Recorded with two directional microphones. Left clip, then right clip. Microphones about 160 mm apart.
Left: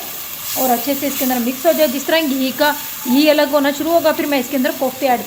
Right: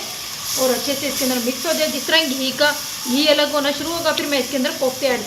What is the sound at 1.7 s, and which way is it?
Speech, 90° left.